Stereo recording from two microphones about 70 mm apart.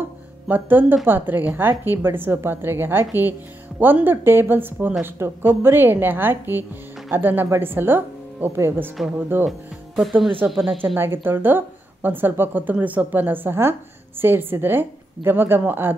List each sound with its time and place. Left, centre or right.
0.5 s speech: right
10.5 s speech: centre
11.0 s speech: right